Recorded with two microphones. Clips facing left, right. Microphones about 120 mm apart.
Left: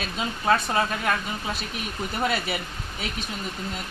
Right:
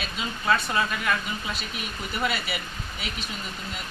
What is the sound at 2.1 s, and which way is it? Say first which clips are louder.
Speech: left 2 dB; 40° left (ahead or behind).